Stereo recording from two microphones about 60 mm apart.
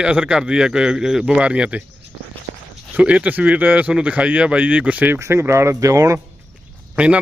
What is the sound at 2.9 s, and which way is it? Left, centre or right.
Speech, right.